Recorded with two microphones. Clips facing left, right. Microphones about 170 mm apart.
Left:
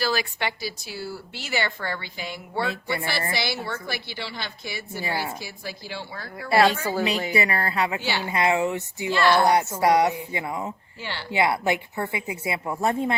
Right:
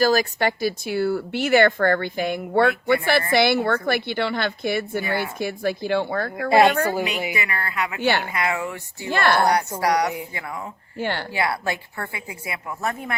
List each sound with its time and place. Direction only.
0.0 s a woman's voice: 45° right (ahead or behind)
7.3 s speech: 35° left (ahead or behind)
8.0 s a woman's voice: 55° right (ahead or behind)
8.3 s a woman's voice: 25° left (ahead or behind)
9.0 s speech: 55° right (ahead or behind)
9.4 s a woman's voice: 20° left (ahead or behind)
10.9 s speech: 50° right (ahead or behind)
11.3 s a woman's voice: 20° left (ahead or behind)